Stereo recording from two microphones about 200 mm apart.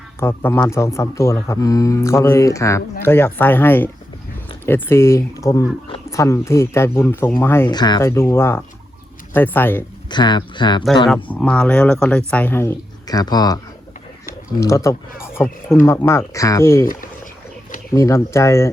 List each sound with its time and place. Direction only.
0.2 s speech: 10° left (ahead or behind)
10.1 s speech: 20° left (ahead or behind)
11.1 s speech: 5° left (ahead or behind)
14.6 s speech: 15° left (ahead or behind)
17.9 s speech: 15° left (ahead or behind)